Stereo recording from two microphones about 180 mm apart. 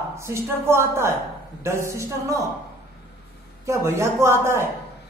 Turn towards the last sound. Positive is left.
turn(degrees=-15)  # may be behind; listen again after turning